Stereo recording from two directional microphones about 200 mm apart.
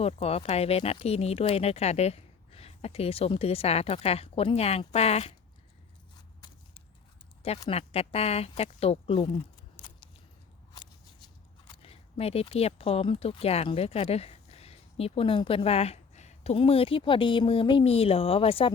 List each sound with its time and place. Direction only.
0.0 s speech: 30° left (ahead or behind)
7.7 s speech: 30° left (ahead or behind)
9.7 s a sound: 20° left (ahead or behind)
11.7 s speech: 30° left (ahead or behind)